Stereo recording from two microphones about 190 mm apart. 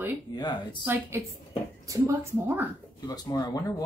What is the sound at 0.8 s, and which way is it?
Speech, 10° right (ahead or behind).